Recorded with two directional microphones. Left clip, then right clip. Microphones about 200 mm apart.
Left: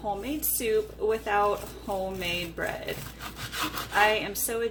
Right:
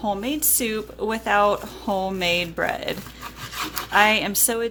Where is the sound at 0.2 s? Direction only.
60° right (ahead or behind).